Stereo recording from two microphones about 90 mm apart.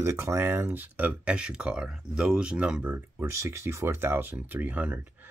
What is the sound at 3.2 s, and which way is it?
Speech, 30° right (ahead or behind).